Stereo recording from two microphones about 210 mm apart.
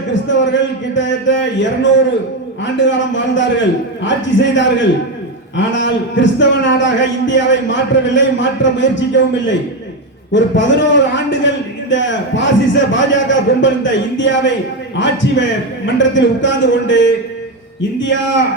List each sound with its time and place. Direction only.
0.1 s a man's voice: 60° left (ahead or behind)